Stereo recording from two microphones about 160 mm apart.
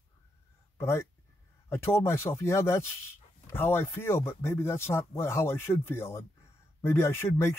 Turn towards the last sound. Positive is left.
turn(degrees=15)  # may be behind; listen again after turning